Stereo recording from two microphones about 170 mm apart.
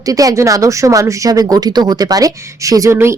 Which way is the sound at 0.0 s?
20° right (ahead or behind).